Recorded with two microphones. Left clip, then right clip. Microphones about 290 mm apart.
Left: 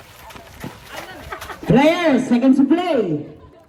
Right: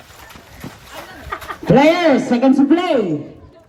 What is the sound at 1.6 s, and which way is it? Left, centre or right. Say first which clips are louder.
Speech: right 3 dB; right.